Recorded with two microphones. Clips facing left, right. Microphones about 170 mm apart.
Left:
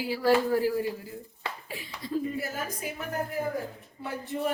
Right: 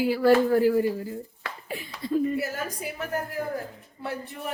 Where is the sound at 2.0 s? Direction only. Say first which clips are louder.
Right 5 dB; 55° right (ahead or behind).